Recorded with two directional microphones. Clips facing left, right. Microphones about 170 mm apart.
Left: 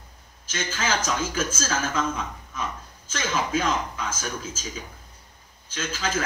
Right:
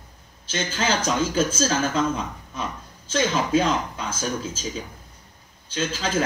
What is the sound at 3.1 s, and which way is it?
Speech, 35° right (ahead or behind).